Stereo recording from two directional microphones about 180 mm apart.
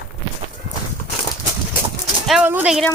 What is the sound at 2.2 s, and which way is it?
Speech, centre (ahead or behind).